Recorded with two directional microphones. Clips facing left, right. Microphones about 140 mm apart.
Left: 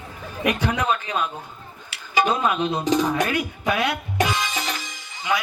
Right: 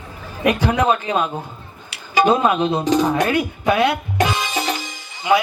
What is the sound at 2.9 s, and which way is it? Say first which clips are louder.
Music: right 4 dB; 30° right (ahead or behind).